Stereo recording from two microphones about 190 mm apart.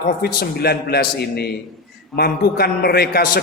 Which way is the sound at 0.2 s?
55° left (ahead or behind).